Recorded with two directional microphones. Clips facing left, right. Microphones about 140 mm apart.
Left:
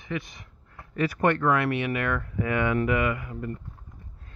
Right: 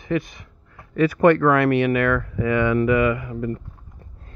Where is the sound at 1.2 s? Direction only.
90° right.